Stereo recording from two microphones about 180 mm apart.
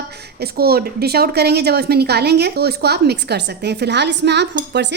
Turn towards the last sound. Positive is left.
turn(degrees=-70)  # may be behind; listen again after turning